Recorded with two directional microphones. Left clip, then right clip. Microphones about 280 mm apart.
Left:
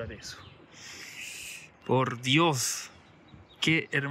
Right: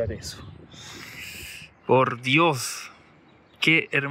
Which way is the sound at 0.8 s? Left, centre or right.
Centre.